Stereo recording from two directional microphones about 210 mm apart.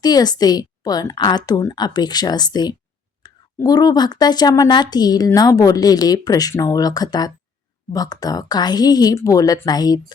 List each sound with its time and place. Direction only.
0.0 s a woman's voice: 20° left (ahead or behind)